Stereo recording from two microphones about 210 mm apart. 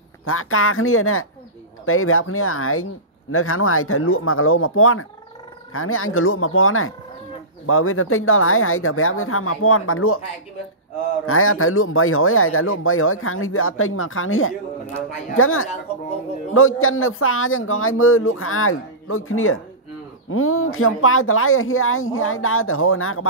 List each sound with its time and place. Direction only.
0.2 s speech: 85° left
11.2 s speech: 85° left